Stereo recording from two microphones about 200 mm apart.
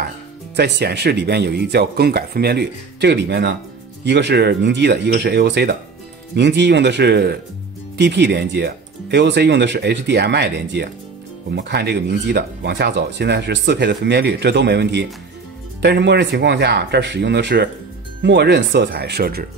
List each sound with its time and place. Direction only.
0.6 s speech: 55° right (ahead or behind)